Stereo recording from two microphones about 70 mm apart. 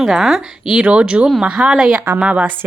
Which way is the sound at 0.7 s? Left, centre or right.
Centre.